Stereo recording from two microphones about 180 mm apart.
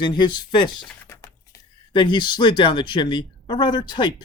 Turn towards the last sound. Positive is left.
turn(degrees=25)  # may be behind; listen again after turning